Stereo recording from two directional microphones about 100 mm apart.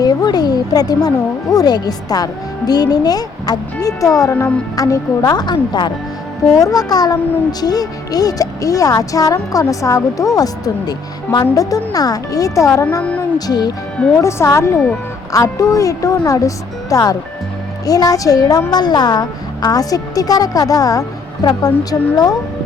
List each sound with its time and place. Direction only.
0.0 s speech: 40° left (ahead or behind)
6.5 s speech: 35° left (ahead or behind)
14.2 s speech: 30° left (ahead or behind)